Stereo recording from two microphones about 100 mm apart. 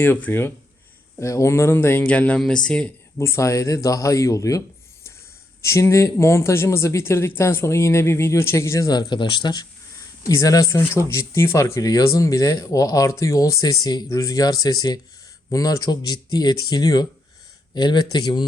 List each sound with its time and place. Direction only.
0.0 s speech: 20° left (ahead or behind)
1.2 s speech: 30° left (ahead or behind); by 2.9 s 10° left (ahead or behind)
3.2 s speech: 30° left (ahead or behind)
5.6 s speech: 30° left (ahead or behind)
8.9 s speech: 45° left (ahead or behind)